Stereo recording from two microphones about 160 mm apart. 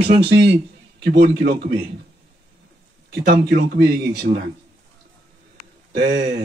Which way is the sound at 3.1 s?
75° right (ahead or behind).